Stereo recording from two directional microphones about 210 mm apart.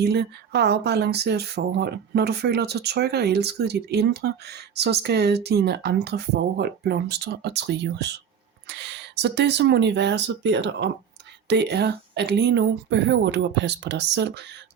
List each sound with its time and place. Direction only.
0.0 s speech: 50° right (ahead or behind)